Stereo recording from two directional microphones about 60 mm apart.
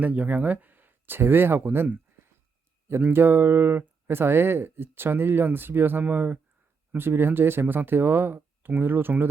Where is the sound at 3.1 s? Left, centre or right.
Right.